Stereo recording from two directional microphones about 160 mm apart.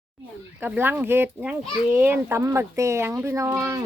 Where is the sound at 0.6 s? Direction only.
10° right (ahead or behind).